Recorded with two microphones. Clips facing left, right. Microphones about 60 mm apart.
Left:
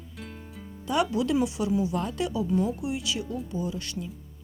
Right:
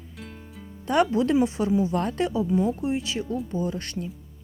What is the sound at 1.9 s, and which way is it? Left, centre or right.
Speech, right.